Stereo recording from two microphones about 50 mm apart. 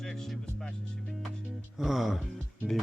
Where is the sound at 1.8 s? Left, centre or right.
Centre.